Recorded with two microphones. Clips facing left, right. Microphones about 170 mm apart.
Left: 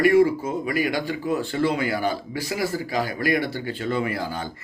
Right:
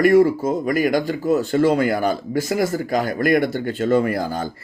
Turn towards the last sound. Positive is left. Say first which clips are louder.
# right 7 dB
turn(degrees=-45)  # may be behind; listen again after turning